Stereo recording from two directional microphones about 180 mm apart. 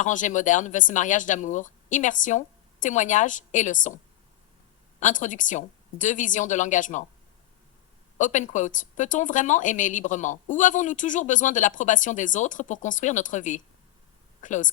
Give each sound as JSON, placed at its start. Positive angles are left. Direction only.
{"t": 0.0, "sound": "speech", "side_deg": 45}
{"t": 4.9, "sound": "speech", "side_deg": 45}
{"t": 8.2, "sound": "speech", "side_deg": 45}